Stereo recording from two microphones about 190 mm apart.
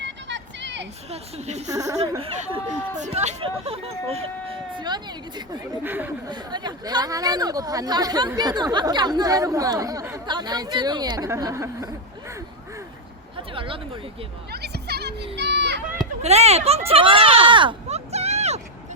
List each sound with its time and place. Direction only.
0.0 s vehicle: 70° right (ahead or behind)
1.1 s speech: 35° right (ahead or behind)
1.7 s speech: 15° right (ahead or behind)
2.0 s speech: 30° right (ahead or behind)
5.8 s speech: 10° right (ahead or behind)
6.2 s speech: 20° right (ahead or behind)
13.3 s a sound: 25° right (ahead or behind)
14.5 s a sound: 60° right (ahead or behind)
15.4 s children playing: 65° right (ahead or behind)
16.2 s speech: 35° right (ahead or behind)